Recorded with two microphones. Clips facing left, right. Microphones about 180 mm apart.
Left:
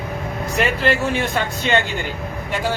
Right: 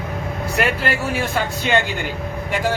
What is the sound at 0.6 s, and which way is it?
Speech, 10° right (ahead or behind).